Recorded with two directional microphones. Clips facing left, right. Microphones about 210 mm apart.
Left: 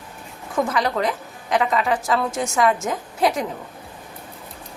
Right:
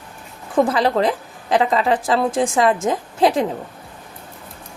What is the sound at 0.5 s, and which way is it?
A woman's voice, 30° right (ahead or behind).